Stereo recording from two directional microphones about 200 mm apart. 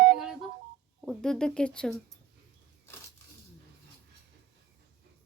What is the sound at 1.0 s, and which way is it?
Speech, 5° left (ahead or behind).